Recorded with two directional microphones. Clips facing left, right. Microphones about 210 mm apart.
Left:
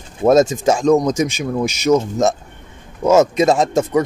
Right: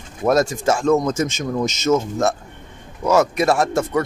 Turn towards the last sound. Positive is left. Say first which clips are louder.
# left 3 dB
turn(degrees=20)  # may be behind; listen again after turning